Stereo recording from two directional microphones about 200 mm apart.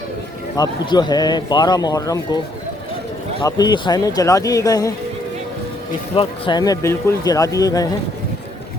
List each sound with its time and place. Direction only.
0.5 s speech: 20° left (ahead or behind)
3.4 s speech: 20° left (ahead or behind)
6.1 s speech: 25° left (ahead or behind)